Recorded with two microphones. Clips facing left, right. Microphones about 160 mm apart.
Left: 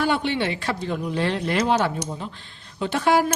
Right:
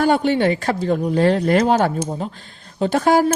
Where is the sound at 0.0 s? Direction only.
45° right (ahead or behind).